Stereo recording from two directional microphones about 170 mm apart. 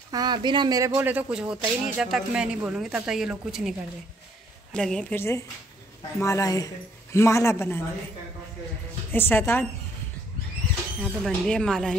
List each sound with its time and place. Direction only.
0.1 s speech: 25° right (ahead or behind); by 3.7 s 5° right (ahead or behind)
4.7 s speech: 5° left (ahead or behind)
6.1 s a woman's voice: 15° left (ahead or behind)
9.1 s a woman's voice: 10° left (ahead or behind)
11.0 s speech: 5° left (ahead or behind)